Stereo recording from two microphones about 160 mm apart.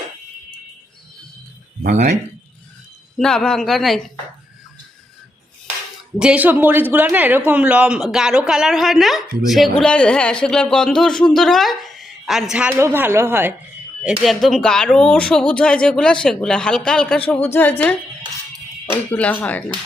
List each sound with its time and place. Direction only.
1.8 s speech: 50° right (ahead or behind)
3.2 s speech: 5° left (ahead or behind)
6.1 s a man's voice: 5° right (ahead or behind)
14.0 s speech: centre (ahead or behind)